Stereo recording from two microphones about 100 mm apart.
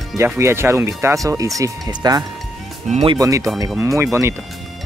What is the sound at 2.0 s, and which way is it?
Speech, 45° right (ahead or behind).